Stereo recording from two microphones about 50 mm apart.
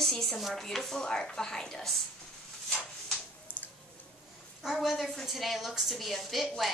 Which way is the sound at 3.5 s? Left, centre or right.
Right.